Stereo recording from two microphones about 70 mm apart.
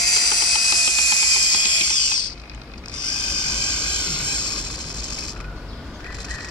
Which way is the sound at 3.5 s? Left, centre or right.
Centre.